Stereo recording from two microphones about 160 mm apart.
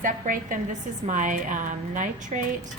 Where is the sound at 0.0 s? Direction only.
55° right (ahead or behind).